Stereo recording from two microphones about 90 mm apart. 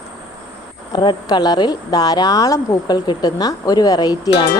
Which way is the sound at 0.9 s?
55° left (ahead or behind).